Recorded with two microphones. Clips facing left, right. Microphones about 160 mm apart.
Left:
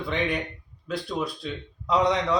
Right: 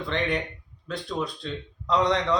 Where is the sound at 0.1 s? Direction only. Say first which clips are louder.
Even; 5° left (ahead or behind).